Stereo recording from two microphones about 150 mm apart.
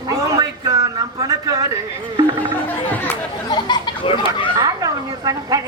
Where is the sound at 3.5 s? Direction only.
30° left (ahead or behind).